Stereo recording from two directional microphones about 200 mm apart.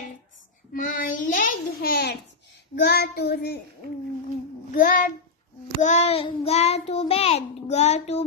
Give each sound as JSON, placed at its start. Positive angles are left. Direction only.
{"t": 0.7, "sound": "a child's voice", "side_deg": 45}
{"t": 2.7, "sound": "child singing", "side_deg": 55}
{"t": 4.7, "sound": "a child's voice", "side_deg": 45}
{"t": 5.8, "sound": "child singing", "side_deg": 35}